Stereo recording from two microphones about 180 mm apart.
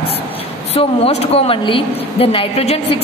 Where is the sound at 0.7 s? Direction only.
35° left (ahead or behind).